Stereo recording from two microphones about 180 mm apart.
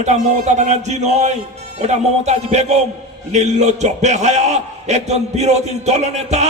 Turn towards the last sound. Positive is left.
turn(degrees=-40)  # may be behind; listen again after turning